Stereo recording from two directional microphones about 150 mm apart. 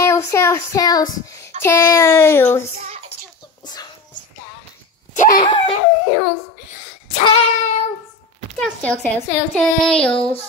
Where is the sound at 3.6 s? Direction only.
30° left (ahead or behind).